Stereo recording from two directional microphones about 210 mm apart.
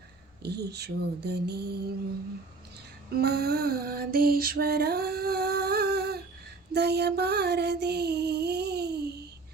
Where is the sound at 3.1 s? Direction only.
50° right (ahead or behind).